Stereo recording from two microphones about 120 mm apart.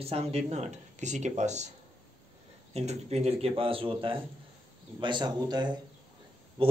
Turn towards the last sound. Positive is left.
turn(degrees=-50)  # may be behind; listen again after turning